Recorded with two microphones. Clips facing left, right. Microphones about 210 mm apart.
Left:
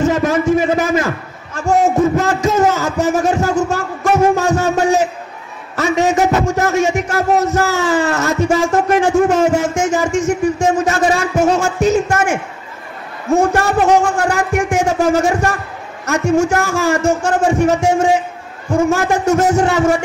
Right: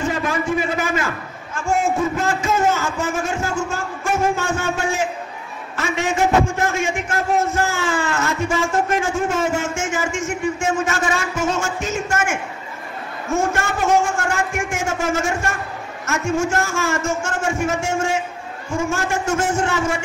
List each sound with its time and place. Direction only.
0.0 s a sound: 45° left (ahead or behind)
5.8 s a man's voice: 40° left (ahead or behind)
7.2 s a man's voice: 75° left (ahead or behind)
7.5 s a man's voice: 40° left (ahead or behind)
13.5 s a man's voice: 35° left (ahead or behind)